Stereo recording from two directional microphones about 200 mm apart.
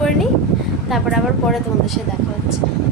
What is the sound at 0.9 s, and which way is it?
Speech, centre (ahead or behind).